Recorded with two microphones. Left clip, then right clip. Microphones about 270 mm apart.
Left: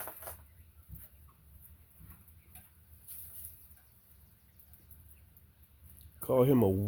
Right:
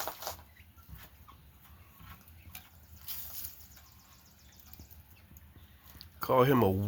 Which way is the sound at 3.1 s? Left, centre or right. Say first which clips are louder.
Right 12 dB; right.